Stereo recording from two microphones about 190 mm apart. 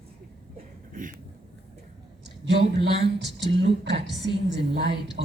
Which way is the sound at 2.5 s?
60° right (ahead or behind).